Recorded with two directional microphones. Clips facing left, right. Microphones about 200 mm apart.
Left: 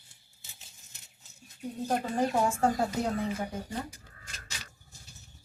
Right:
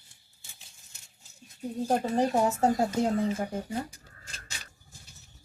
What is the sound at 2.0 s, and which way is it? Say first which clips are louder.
Speech: right 1 dB; 25° right (ahead or behind).